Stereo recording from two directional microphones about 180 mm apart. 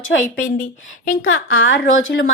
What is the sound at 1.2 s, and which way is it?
A woman's voice, 90° left.